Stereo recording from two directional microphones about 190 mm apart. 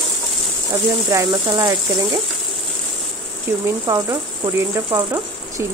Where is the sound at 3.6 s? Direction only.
15° right (ahead or behind).